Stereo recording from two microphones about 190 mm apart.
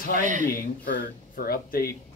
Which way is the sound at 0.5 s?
50° left (ahead or behind).